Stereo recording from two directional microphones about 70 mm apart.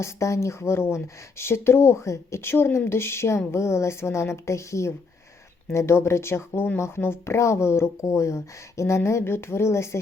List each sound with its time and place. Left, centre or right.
0.0 s speech: left